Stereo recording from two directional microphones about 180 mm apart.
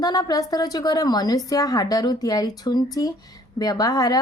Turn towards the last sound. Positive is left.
turn(degrees=20)  # may be behind; listen again after turning